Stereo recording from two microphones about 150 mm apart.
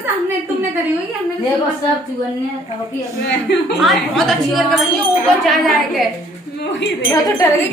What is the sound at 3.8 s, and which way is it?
A woman's voice, centre (ahead or behind).